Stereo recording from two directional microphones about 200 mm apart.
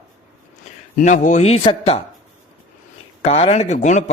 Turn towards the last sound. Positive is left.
turn(degrees=35)  # may be behind; listen again after turning